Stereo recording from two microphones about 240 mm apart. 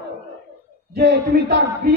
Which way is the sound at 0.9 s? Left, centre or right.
Right.